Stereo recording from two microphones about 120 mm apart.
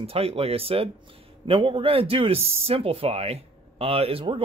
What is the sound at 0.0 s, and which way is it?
Speech, 55° right (ahead or behind).